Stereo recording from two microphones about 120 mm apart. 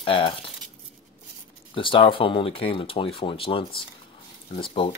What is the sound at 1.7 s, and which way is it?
Speech, 45° left (ahead or behind).